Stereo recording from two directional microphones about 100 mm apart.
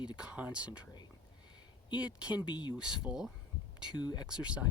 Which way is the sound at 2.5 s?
50° left (ahead or behind).